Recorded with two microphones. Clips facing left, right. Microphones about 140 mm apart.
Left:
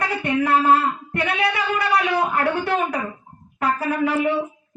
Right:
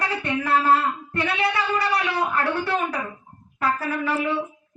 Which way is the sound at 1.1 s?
50° left (ahead or behind).